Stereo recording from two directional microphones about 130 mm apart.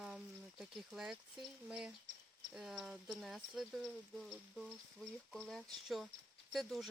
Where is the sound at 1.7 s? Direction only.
5° right (ahead or behind).